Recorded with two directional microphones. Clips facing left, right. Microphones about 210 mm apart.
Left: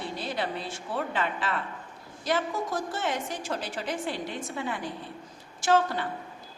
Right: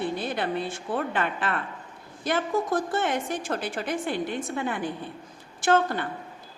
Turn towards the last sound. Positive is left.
turn(degrees=-55)  # may be behind; listen again after turning